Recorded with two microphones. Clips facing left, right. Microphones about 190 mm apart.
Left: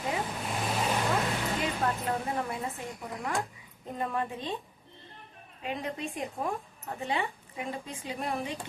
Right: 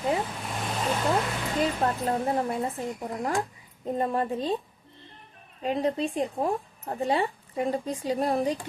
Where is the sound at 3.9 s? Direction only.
35° right (ahead or behind).